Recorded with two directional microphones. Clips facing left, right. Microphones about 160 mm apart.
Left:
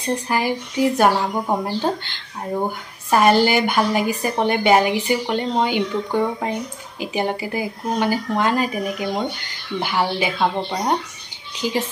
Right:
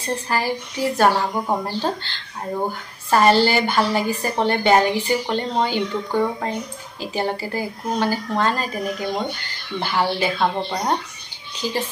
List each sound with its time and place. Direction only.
0.3 s a woman's voice: 15° left (ahead or behind)
3.1 s a woman's voice: 15° left (ahead or behind)